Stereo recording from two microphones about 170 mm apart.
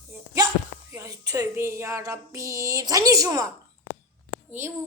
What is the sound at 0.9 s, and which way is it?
Speech, 20° right (ahead or behind).